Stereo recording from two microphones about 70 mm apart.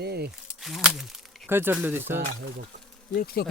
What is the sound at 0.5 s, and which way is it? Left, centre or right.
Speech, centre.